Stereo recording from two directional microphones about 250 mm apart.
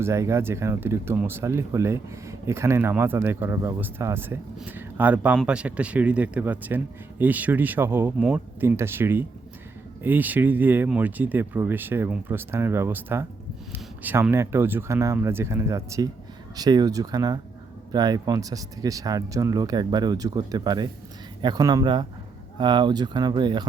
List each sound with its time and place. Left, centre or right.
0.0 s speech: centre